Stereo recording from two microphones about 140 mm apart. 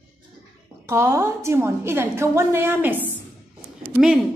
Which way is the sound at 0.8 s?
20° right (ahead or behind).